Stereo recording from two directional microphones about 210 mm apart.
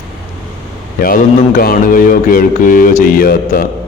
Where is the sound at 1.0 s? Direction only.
45° left (ahead or behind).